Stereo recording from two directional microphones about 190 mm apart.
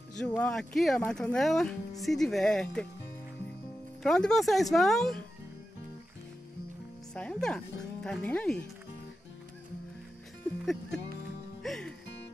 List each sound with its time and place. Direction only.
0.2 s speech: 5° left (ahead or behind)
4.0 s speech: 5° left (ahead or behind)
7.2 s speech: 5° left (ahead or behind)
10.6 s speech: centre (ahead or behind)
11.6 s music: centre (ahead or behind)